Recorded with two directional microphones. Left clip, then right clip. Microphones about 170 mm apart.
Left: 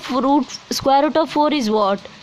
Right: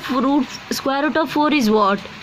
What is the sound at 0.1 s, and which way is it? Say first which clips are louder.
Speech: left 2 dB; 50° left (ahead or behind).